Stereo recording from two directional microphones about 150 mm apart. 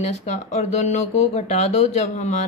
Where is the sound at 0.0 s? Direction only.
50° left (ahead or behind).